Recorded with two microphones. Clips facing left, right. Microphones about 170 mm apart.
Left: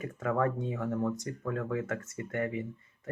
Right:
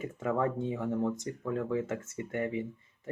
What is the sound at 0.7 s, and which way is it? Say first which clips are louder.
Speech: right 1 dB; 20° right (ahead or behind).